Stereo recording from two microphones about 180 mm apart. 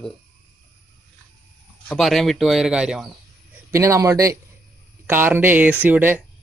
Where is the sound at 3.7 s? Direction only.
15° right (ahead or behind).